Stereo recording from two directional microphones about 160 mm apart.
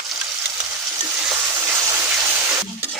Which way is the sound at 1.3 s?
20° right (ahead or behind).